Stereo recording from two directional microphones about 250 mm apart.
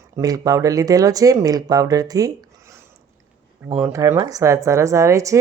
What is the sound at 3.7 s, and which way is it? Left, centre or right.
Speech, centre.